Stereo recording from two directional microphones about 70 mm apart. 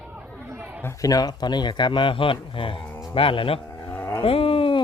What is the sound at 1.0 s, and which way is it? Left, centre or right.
Speech, left.